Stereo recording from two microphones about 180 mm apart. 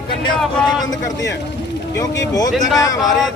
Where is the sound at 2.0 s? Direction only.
20° left (ahead or behind).